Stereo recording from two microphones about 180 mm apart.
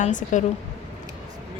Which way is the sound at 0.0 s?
45° left (ahead or behind).